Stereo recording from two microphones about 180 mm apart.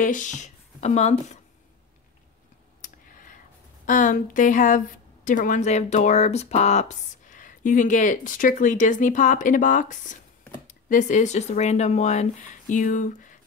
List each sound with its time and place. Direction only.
0.0 s speech: 45° left (ahead or behind)
3.8 s speech: 45° left (ahead or behind)